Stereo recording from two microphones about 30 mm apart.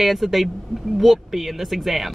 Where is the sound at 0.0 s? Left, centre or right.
Centre.